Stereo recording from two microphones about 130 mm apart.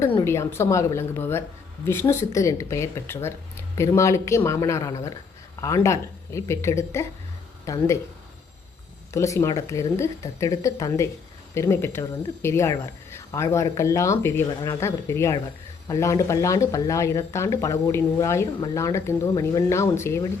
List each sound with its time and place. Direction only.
0.3 s speech: 20° left (ahead or behind)
9.1 s speech: 25° left (ahead or behind)